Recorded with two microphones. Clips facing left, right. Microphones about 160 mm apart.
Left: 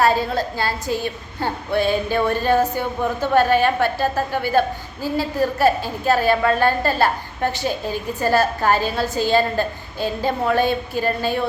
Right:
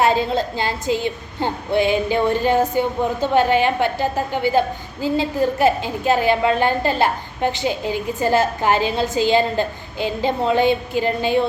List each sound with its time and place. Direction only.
0.0 s a woman's voice: 20° right (ahead or behind)